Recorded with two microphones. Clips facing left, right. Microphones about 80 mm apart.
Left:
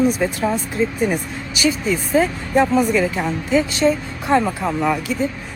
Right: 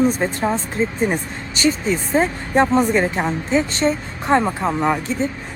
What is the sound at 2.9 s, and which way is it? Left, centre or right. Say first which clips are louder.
Speech: even; right.